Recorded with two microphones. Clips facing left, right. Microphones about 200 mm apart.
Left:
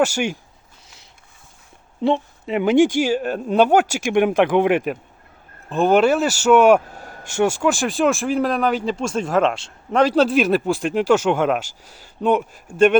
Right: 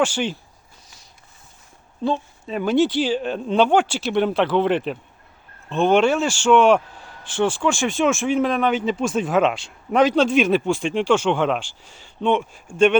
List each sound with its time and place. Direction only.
0.0 s speech: 10° left (ahead or behind)
2.0 s speech: 25° left (ahead or behind); by 6.8 s 5° left (ahead or behind)
6.9 s vehicle: 45° left (ahead or behind)
7.3 s speech: 10° left (ahead or behind)